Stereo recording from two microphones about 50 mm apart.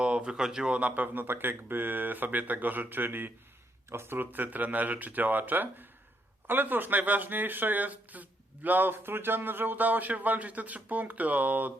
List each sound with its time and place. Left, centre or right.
0.0 s speech: right
0.7 s speech: right
3.8 s speech: right
4.3 s speech: right